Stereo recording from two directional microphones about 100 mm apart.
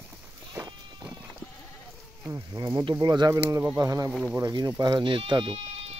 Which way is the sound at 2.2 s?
30° right (ahead or behind).